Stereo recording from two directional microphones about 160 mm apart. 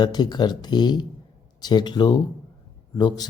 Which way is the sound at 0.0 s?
25° left (ahead or behind).